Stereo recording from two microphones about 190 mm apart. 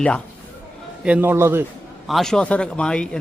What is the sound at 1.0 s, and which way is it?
Speech, 5° right (ahead or behind).